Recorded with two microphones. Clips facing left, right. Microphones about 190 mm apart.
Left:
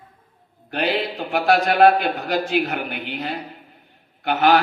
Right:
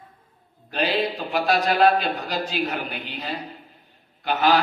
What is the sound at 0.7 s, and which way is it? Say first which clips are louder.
A man's voice: left 1 dB; 60° left (ahead or behind).